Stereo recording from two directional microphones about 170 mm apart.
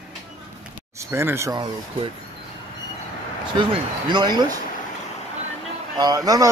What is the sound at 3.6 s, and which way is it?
Speech, 25° right (ahead or behind).